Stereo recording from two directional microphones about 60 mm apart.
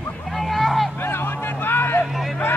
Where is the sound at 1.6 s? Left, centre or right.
Left.